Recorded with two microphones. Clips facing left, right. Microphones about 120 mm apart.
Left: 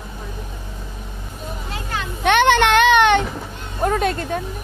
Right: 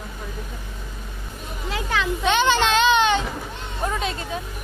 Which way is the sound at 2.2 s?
60° left (ahead or behind).